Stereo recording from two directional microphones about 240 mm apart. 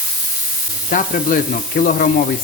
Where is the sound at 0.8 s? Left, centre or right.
Left.